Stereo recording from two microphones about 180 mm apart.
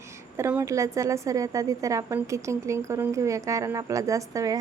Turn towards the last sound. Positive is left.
turn(degrees=-20)  # may be behind; listen again after turning